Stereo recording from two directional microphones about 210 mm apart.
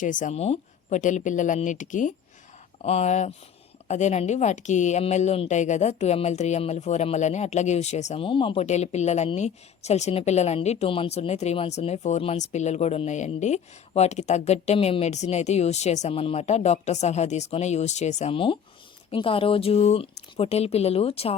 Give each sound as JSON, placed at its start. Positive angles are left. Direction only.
{"t": 0.0, "sound": "a woman's voice", "side_deg": 40}